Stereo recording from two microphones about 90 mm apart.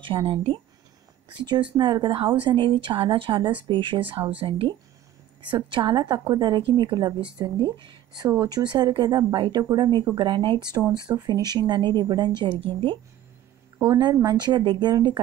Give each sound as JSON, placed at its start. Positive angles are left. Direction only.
{"t": 0.0, "sound": "speech", "side_deg": -75}
{"t": 1.4, "sound": "a woman's voice", "side_deg": -55}
{"t": 5.5, "sound": "a woman's voice", "side_deg": -60}
{"t": 7.5, "sound": "speech", "side_deg": -60}
{"t": 8.4, "sound": "speech", "side_deg": -45}
{"t": 10.1, "sound": "a woman's voice", "side_deg": -60}
{"t": 11.0, "sound": "speech", "side_deg": -50}
{"t": 12.4, "sound": "a woman's voice", "side_deg": -65}
{"t": 13.8, "sound": "speech", "side_deg": -50}
{"t": 14.6, "sound": "a woman's voice", "side_deg": -65}